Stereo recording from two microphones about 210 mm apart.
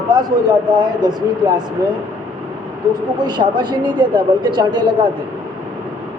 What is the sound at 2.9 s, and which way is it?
Speech, 20° right (ahead or behind).